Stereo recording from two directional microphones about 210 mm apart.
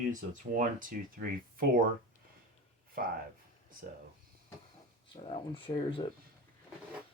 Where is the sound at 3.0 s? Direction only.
45° right (ahead or behind).